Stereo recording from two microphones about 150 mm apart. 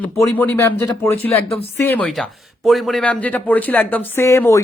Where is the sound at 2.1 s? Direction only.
Centre (ahead or behind).